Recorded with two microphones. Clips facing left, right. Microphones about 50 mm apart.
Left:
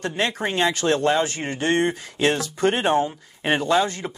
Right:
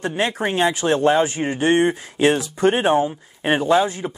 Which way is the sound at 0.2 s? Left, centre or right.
Right.